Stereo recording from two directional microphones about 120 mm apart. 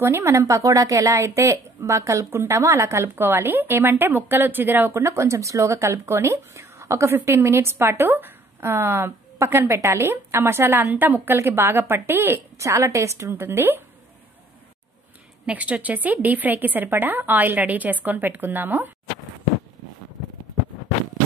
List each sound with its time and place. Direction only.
0.0 s a woman's voice: 20° right (ahead or behind)
15.4 s speech: 10° right (ahead or behind)